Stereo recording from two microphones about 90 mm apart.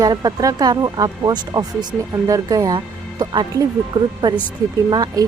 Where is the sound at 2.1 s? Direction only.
40° right (ahead or behind).